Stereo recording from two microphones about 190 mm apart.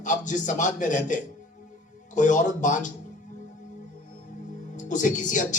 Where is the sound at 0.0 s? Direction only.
40° left (ahead or behind).